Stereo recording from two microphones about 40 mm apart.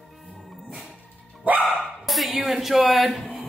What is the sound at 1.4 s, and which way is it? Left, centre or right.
Dog, right.